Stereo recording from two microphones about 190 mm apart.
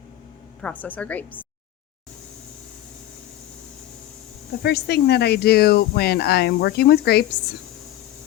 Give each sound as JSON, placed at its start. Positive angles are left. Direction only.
{"t": 0.6, "sound": "a woman's voice", "side_deg": 10}
{"t": 4.6, "sound": "speech", "side_deg": 60}